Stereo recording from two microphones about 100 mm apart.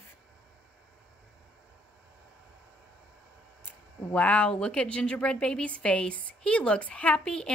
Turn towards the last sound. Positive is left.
turn(degrees=10)  # may be behind; listen again after turning